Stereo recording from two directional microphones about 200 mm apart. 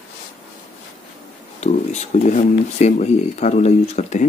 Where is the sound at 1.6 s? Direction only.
35° left (ahead or behind).